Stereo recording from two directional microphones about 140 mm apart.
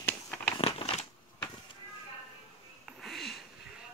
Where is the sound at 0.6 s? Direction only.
45° left (ahead or behind).